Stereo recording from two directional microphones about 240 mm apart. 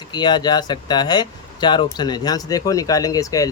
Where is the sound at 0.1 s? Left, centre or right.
Centre.